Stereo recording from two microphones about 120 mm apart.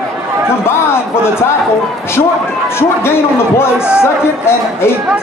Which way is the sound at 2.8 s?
20° left (ahead or behind).